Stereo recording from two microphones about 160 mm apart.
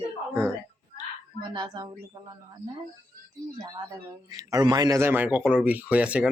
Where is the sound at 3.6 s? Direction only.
25° right (ahead or behind).